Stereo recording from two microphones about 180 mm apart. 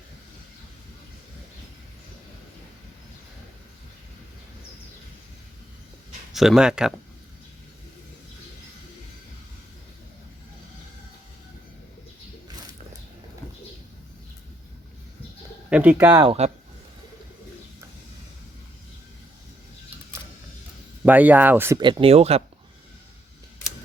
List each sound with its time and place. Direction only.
6.3 s speech: centre (ahead or behind)
15.7 s speech: 10° right (ahead or behind)
16.2 s speech: 30° right (ahead or behind)
21.0 s speech: 10° right (ahead or behind)
21.8 s speech: 25° right (ahead or behind)